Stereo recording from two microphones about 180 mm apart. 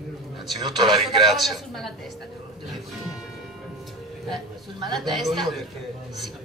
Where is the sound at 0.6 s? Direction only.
25° right (ahead or behind).